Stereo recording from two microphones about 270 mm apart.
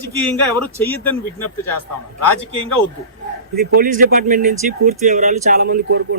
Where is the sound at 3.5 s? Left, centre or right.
Right.